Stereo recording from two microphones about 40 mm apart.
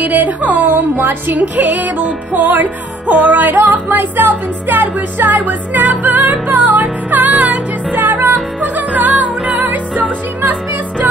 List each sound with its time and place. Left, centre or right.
0.0 s music: right
1.6 s music: right
7.9 s music: right
8.5 s music: right